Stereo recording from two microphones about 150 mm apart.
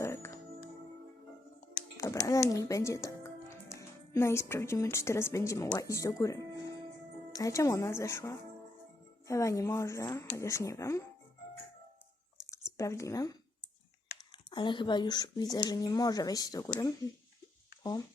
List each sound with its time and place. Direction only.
0.0 s music: 20° left (ahead or behind)
2.0 s a child's voice: 20° left (ahead or behind)
12.7 s speech: 20° left (ahead or behind)
14.5 s speech: 30° left (ahead or behind)